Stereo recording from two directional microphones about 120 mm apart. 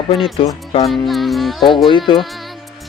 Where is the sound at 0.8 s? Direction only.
Centre (ahead or behind).